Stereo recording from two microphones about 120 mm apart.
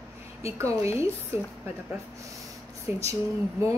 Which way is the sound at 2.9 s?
15° right (ahead or behind).